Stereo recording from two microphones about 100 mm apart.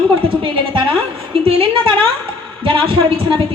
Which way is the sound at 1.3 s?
65° right (ahead or behind).